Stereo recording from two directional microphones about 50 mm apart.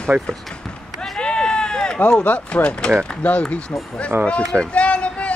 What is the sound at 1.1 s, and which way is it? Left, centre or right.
Sheep, centre.